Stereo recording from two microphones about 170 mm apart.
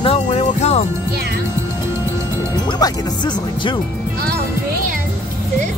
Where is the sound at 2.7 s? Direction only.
25° left (ahead or behind).